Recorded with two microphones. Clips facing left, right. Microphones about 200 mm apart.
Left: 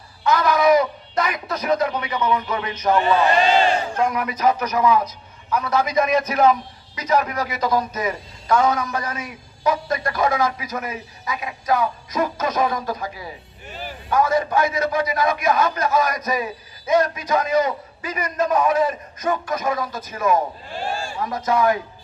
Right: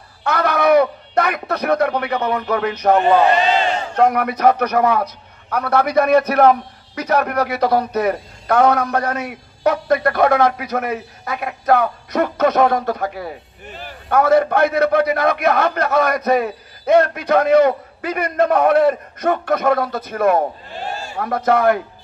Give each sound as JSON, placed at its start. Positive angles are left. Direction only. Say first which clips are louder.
{"t": 0.2, "sound": "a man's voice", "louder": "even", "side_deg": -65}